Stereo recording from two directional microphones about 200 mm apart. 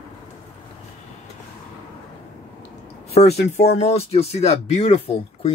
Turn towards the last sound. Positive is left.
turn(degrees=30)  # may be behind; listen again after turning